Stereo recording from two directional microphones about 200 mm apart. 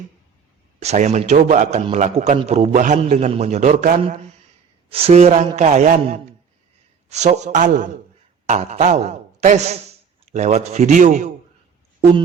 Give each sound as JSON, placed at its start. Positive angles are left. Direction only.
{"t": 0.8, "sound": "a man's voice", "side_deg": -35}
{"t": 4.9, "sound": "a man's voice", "side_deg": -30}